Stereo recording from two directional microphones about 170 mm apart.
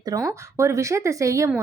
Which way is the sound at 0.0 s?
20° right (ahead or behind).